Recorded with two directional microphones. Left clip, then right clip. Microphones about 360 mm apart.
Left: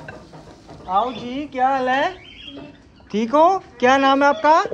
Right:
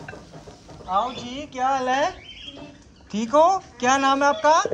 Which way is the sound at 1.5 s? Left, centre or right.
Centre.